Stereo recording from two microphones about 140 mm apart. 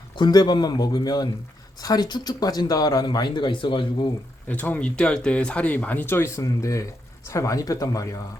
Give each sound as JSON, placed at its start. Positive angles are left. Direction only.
{"t": 0.2, "sound": "speech", "side_deg": 30}
{"t": 4.4, "sound": "speech", "side_deg": 10}